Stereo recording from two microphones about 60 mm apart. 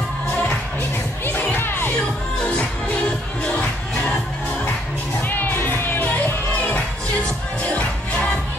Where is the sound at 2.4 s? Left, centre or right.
Centre.